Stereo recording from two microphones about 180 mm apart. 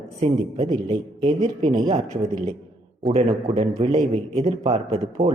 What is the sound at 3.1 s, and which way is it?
A man's voice, 30° right (ahead or behind).